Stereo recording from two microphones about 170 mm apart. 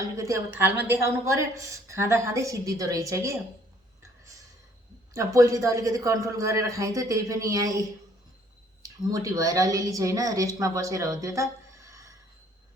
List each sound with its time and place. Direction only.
0.0 s a woman's voice: 15° right (ahead or behind)
5.1 s a man's voice: 20° right (ahead or behind)